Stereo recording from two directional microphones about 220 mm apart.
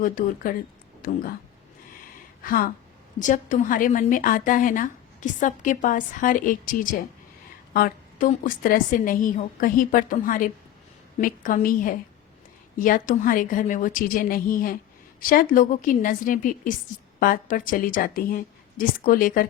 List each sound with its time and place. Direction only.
0.0 s a woman's voice: 40° left (ahead or behind)
2.4 s a woman's voice: 40° left (ahead or behind)